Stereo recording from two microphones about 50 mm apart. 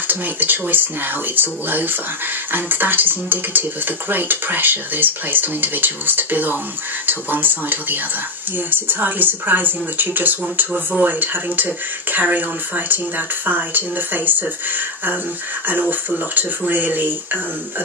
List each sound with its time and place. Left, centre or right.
0.1 s speech: right